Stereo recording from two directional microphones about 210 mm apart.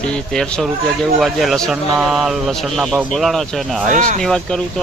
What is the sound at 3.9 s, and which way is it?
Speech, 35° right (ahead or behind).